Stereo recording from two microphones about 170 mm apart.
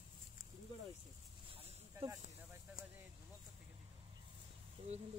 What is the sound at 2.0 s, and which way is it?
Speech, 35° right (ahead or behind).